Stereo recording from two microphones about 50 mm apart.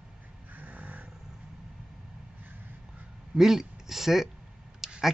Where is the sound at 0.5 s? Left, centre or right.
Right.